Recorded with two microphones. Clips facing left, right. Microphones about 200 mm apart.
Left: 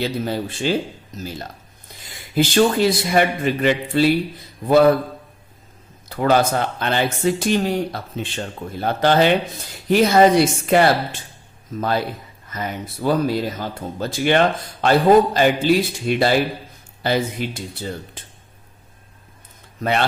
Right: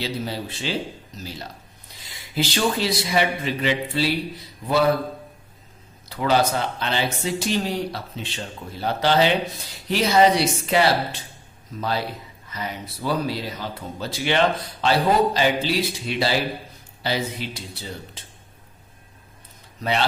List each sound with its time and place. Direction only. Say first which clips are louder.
0.0 s speech: left 5 dB; 50° left (ahead or behind)
1.9 s a sound: left 5 dB; 50° left (ahead or behind)
2.3 s speech: left 7 dB; 50° left (ahead or behind)
6.1 s speech: left 3 dB; 50° left (ahead or behind)
19.8 s speech: left 3 dB; 55° left (ahead or behind)